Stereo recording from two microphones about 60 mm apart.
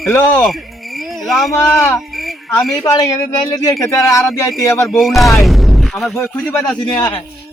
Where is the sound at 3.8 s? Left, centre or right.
Left.